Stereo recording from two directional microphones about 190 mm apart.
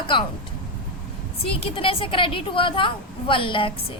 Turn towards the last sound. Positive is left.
turn(degrees=25)  # may be behind; listen again after turning